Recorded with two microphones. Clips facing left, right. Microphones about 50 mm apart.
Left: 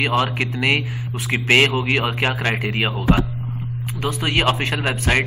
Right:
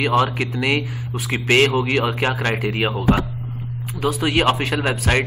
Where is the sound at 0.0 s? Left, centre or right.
Centre.